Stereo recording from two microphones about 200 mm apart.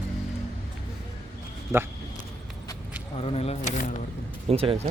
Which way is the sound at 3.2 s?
30° left (ahead or behind).